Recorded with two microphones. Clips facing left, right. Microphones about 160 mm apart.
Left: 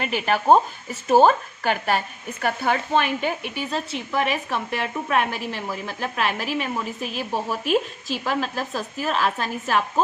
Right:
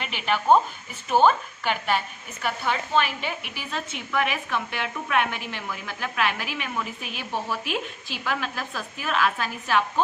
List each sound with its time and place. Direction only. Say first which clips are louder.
0.0 s a woman's voice: left 4 dB; 40° left (ahead or behind)
3.4 s a woman's voice: left 6 dB; 35° left (ahead or behind)